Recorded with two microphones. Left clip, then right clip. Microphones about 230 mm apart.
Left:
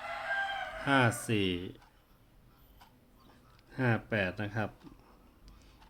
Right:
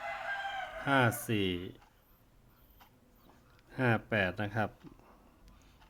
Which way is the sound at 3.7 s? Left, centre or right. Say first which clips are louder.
Right 1 dB; centre.